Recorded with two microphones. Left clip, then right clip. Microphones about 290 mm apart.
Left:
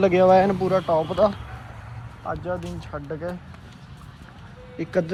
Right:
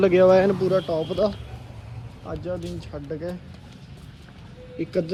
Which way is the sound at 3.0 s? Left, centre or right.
Left.